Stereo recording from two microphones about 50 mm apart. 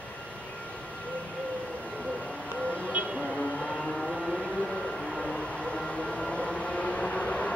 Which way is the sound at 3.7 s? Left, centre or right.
Centre.